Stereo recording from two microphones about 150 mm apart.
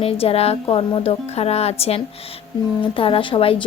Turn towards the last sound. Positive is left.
turn(degrees=35)  # may be behind; listen again after turning